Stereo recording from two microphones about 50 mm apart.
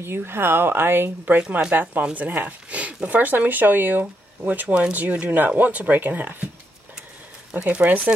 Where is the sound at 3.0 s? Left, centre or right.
Right.